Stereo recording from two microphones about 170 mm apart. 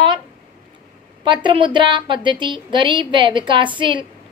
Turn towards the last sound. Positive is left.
turn(degrees=-30)  # may be behind; listen again after turning